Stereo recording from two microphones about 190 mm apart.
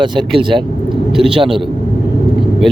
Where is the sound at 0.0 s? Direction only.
25° right (ahead or behind).